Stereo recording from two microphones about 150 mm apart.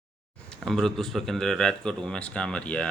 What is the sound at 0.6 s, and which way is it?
Speech, 5° left (ahead or behind).